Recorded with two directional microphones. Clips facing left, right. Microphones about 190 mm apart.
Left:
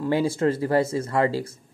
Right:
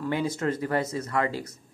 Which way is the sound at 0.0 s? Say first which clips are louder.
Left 5 dB; 30° left (ahead or behind).